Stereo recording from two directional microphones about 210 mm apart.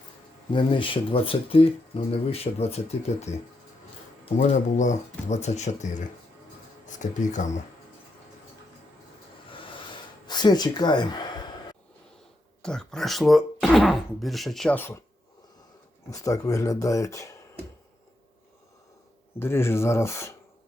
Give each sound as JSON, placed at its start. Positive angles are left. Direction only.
{"t": 0.5, "sound": "speech", "side_deg": 25}
{"t": 4.4, "sound": "speech", "side_deg": 35}
{"t": 9.5, "sound": "gasp", "side_deg": 20}
{"t": 12.6, "sound": "speech", "side_deg": 5}
{"t": 16.0, "sound": "speech", "side_deg": 15}
{"t": 19.4, "sound": "speech", "side_deg": 10}